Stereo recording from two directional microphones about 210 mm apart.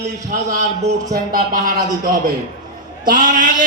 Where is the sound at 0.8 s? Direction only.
40° right (ahead or behind).